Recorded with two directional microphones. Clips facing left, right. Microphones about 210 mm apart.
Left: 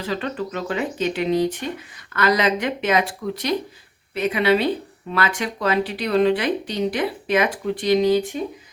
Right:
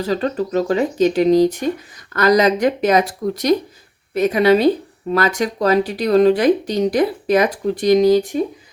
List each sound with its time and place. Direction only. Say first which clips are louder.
0.0 s speech: right 6 dB; 40° right (ahead or behind)